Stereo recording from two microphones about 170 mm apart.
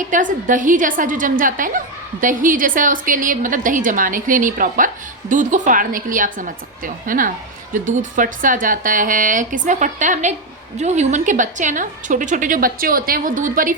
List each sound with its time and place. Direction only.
0.1 s speech: 50° right (ahead or behind)